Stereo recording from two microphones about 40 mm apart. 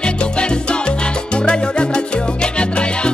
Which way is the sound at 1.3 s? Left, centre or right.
Left.